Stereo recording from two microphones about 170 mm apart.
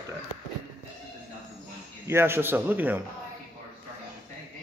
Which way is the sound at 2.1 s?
15° right (ahead or behind).